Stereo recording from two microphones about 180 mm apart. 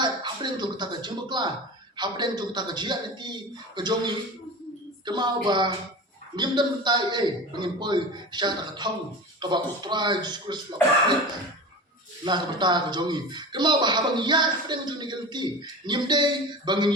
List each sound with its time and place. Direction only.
0.0 s a man's voice: 25° right (ahead or behind)
12.2 s a man's voice: 25° right (ahead or behind)